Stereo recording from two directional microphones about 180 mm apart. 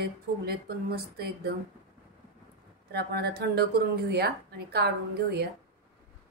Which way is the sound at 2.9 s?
60° right (ahead or behind).